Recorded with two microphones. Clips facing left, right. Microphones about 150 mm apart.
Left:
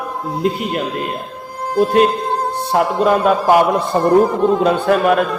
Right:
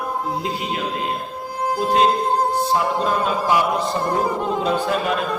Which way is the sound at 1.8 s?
60° left (ahead or behind).